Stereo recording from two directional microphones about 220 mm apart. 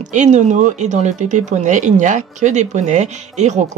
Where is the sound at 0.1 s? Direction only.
35° right (ahead or behind).